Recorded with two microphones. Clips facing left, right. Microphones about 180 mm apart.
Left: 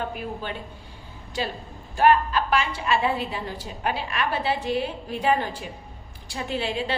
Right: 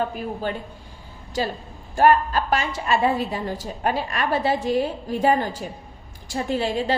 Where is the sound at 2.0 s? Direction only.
40° right (ahead or behind).